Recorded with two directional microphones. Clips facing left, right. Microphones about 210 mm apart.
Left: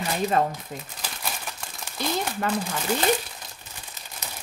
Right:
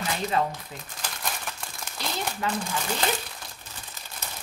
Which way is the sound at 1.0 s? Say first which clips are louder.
Right 3 dB; 5° left (ahead or behind).